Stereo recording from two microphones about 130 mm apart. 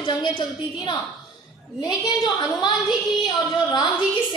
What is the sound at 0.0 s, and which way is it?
Speech, 40° left (ahead or behind).